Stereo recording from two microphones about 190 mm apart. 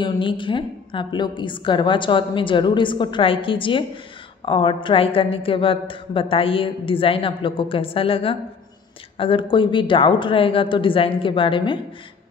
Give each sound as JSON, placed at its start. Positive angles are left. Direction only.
{"t": 0.0, "sound": "a woman's voice", "side_deg": 25}